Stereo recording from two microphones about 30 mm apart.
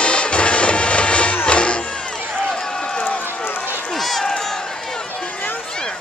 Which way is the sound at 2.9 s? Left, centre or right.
Left.